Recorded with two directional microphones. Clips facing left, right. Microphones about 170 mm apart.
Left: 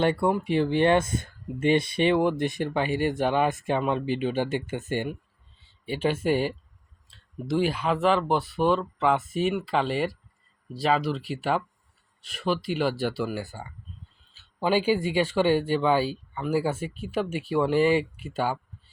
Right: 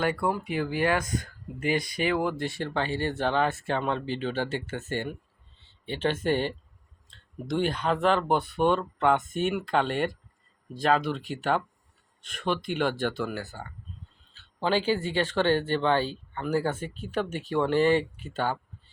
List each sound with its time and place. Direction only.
0.0 s speech: 25° left (ahead or behind); by 18.6 s 10° left (ahead or behind)